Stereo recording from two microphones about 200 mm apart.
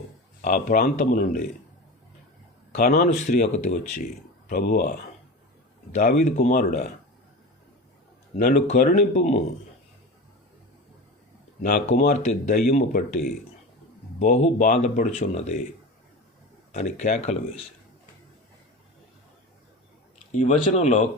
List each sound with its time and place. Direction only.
0.4 s speech: 45° left (ahead or behind)
2.7 s speech: 40° left (ahead or behind)
5.9 s speech: 40° left (ahead or behind)
8.4 s speech: 40° left (ahead or behind)
11.6 s speech: 40° left (ahead or behind)
14.2 s speech: 35° left (ahead or behind)
16.7 s speech: 35° left (ahead or behind)
20.4 s speech: 35° left (ahead or behind)